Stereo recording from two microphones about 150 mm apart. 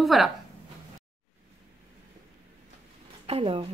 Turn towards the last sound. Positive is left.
turn(degrees=-40)  # may be behind; listen again after turning